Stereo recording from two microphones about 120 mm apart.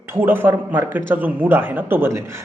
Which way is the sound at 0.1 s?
15° right (ahead or behind).